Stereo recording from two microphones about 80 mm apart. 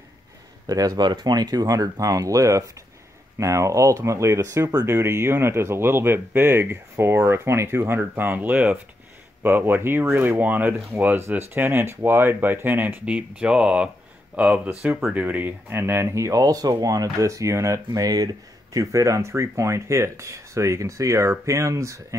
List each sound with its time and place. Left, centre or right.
0.7 s speech: right
4.8 s speech: right
17.9 s speech: right